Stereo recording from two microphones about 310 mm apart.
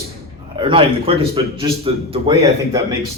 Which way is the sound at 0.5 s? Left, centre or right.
Centre.